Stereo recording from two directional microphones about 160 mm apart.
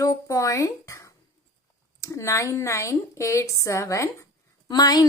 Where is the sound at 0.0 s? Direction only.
20° left (ahead or behind).